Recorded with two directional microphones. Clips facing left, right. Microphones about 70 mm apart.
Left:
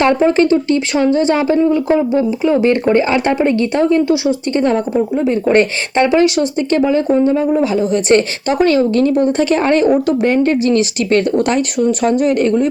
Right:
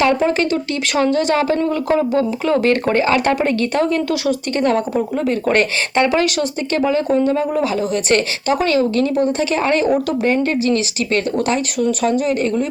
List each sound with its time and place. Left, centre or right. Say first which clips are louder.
0.0 s speech: left 4 dB; left